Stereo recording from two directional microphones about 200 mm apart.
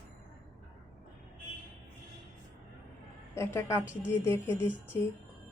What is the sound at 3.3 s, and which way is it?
Speech, 15° left (ahead or behind).